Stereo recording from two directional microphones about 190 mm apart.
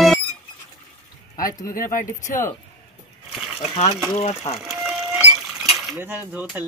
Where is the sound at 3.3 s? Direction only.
Centre (ahead or behind).